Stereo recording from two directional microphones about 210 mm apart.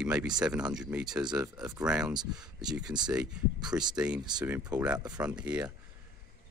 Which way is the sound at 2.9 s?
20° right (ahead or behind).